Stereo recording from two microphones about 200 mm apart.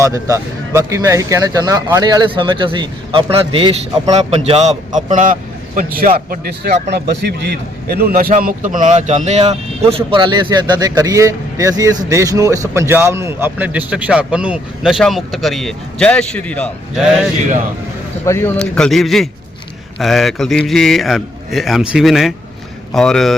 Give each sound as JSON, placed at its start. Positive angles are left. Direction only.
{"t": 0.0, "sound": "a man's voice", "side_deg": -15}
{"t": 18.3, "sound": "a man's voice", "side_deg": 10}